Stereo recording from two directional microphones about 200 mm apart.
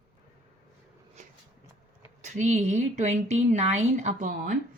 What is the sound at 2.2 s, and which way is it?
Speech, 35° right (ahead or behind).